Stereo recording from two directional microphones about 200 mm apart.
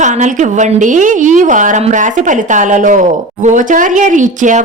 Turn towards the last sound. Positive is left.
turn(degrees=-40)  # may be behind; listen again after turning